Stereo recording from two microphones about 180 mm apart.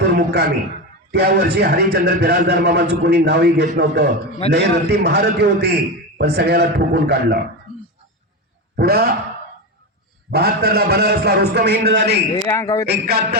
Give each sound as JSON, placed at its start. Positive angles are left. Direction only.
{"t": 0.0, "sound": "a sound", "side_deg": -65}
{"t": 1.1, "sound": "a man's voice", "side_deg": -65}
{"t": 8.7, "sound": "speech", "side_deg": -55}
{"t": 10.3, "sound": "a man's voice", "side_deg": -60}
{"t": 12.5, "sound": "speech", "side_deg": 20}
{"t": 12.8, "sound": "a man's voice", "side_deg": -65}